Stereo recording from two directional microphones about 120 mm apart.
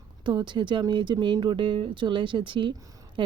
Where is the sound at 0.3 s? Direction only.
40° right (ahead or behind).